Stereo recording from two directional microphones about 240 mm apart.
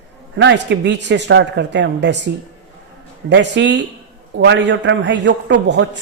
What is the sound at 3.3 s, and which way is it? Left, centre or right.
A man's voice, right.